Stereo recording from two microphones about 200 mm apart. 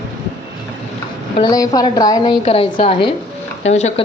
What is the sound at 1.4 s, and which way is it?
A woman's voice, 20° left (ahead or behind).